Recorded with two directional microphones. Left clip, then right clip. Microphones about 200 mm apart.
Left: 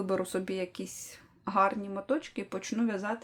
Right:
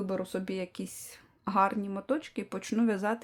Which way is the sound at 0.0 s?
Centre (ahead or behind).